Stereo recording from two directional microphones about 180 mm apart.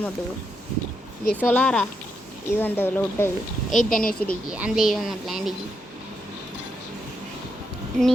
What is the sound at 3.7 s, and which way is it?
Speech, 50° left (ahead or behind).